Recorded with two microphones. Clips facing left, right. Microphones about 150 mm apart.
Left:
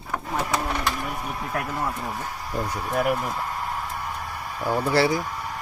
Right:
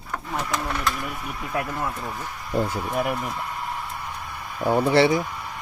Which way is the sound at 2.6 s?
30° right (ahead or behind).